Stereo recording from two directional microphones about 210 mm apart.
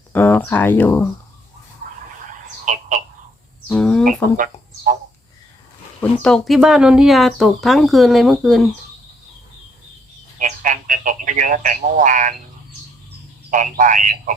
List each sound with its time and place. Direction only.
0.1 s speech: 10° left (ahead or behind)
2.7 s telephone: 35° right (ahead or behind)
3.7 s speech: 5° left (ahead or behind)
6.0 s speech: 5° left (ahead or behind)
10.3 s telephone: 40° right (ahead or behind)
13.1 s frog: 40° right (ahead or behind)